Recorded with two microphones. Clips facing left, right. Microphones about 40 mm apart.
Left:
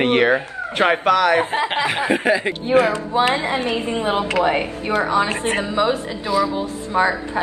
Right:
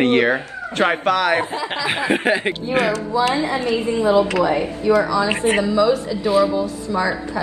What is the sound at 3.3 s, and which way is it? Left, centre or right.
A woman's voice, left.